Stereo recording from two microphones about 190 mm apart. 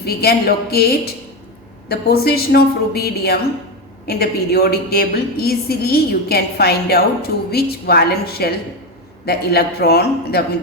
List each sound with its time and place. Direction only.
0.0 s a woman's voice: 55° left (ahead or behind)